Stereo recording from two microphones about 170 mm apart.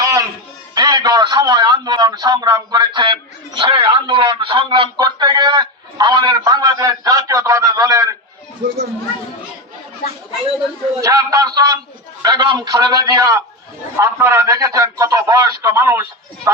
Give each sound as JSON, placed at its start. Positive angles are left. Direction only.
{"t": 0.0, "sound": "a sound", "side_deg": -20}
{"t": 0.7, "sound": "a man's voice", "side_deg": -25}
{"t": 11.0, "sound": "a man's voice", "side_deg": -20}